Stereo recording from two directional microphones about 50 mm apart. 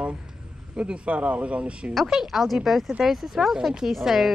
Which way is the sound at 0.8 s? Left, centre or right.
Right.